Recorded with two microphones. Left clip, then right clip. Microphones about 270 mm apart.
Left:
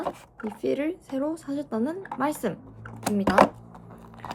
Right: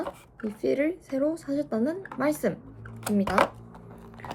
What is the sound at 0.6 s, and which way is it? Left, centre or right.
Speech, centre.